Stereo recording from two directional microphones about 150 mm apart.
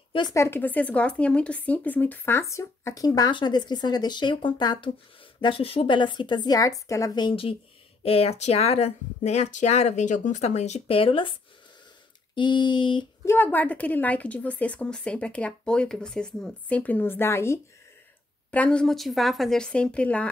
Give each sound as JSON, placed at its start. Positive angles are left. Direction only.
{"t": 0.3, "sound": "speech", "side_deg": 15}
{"t": 12.4, "sound": "speech", "side_deg": 30}
{"t": 13.2, "sound": "a woman's voice", "side_deg": 15}